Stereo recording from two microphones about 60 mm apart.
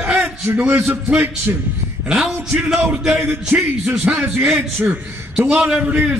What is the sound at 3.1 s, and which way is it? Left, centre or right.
Speech, right.